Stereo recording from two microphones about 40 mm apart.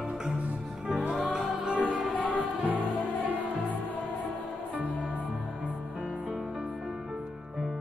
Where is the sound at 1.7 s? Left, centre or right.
Right.